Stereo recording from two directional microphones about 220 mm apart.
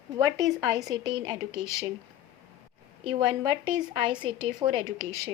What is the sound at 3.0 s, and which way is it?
A woman's voice, 20° right (ahead or behind).